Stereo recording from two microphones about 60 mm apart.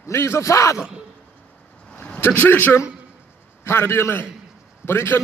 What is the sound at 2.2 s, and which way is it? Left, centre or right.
A man's voice, left.